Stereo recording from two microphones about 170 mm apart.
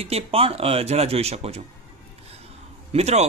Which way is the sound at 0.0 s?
35° right (ahead or behind).